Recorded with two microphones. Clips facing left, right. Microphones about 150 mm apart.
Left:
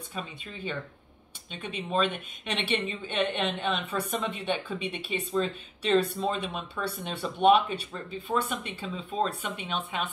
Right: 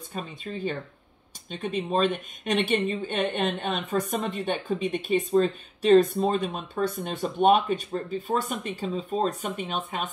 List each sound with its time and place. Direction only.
0.1 s a woman's voice: 40° right (ahead or behind)